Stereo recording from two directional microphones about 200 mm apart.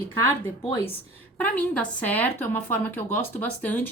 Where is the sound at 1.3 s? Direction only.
10° left (ahead or behind).